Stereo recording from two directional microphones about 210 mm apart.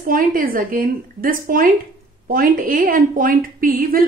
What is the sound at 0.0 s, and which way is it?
A woman's voice, 40° right (ahead or behind).